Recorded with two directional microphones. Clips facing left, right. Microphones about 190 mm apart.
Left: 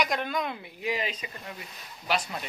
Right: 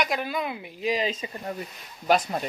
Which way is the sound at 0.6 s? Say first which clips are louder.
Right 5 dB; 20° right (ahead or behind).